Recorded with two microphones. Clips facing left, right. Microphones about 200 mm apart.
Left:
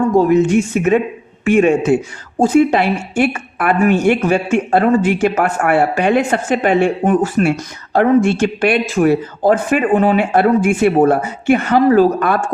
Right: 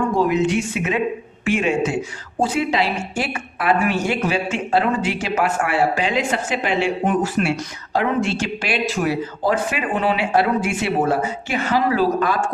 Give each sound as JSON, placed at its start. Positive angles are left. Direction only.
{"t": 0.2, "sound": "a woman's voice", "side_deg": 45}